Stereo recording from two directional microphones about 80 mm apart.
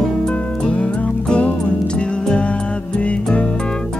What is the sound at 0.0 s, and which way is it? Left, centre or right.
Music, centre.